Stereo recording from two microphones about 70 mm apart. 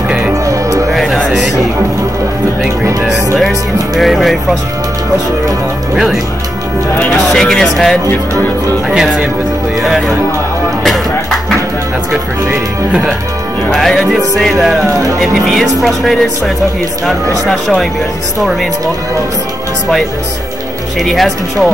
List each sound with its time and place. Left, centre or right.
0.3 s music: right
0.9 s music: centre
3.9 s music: centre
7.1 s music: centre
8.9 s music: centre
13.7 s music: centre
14.9 s speech: right
15.1 s music: centre
17.5 s speech: centre
21.0 s music: centre